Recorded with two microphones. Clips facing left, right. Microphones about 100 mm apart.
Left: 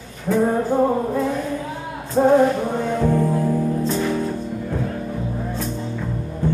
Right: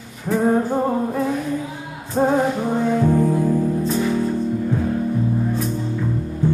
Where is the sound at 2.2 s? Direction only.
15° right (ahead or behind).